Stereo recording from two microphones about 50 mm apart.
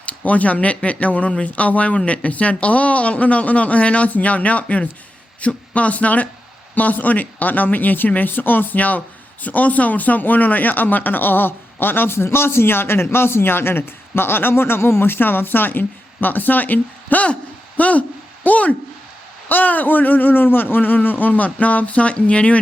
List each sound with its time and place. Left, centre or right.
0.0 s a man's voice: left